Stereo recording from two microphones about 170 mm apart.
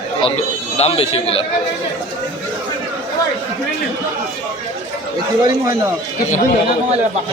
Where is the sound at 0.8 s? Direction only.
35° left (ahead or behind).